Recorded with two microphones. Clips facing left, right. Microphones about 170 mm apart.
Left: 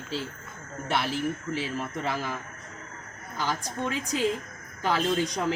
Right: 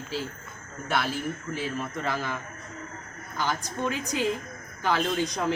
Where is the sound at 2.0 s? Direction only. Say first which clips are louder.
Right 1 dB; 35° left (ahead or behind).